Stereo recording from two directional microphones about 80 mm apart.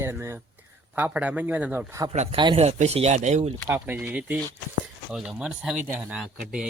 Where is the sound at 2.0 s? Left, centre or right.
Right.